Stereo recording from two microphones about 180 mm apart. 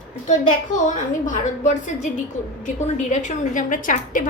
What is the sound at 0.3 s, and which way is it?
A woman's voice, 45° left (ahead or behind).